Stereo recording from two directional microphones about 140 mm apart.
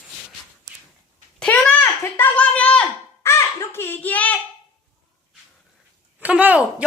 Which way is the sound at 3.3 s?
20° left (ahead or behind).